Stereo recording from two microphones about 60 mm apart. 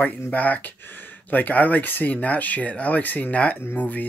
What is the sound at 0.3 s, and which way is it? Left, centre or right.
Speech, left.